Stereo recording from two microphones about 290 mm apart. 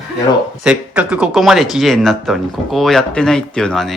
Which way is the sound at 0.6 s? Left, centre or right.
Centre.